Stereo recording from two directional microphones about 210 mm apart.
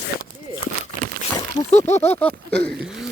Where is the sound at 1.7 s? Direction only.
30° left (ahead or behind).